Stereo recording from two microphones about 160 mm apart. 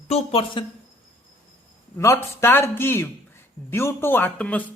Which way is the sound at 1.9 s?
15° left (ahead or behind).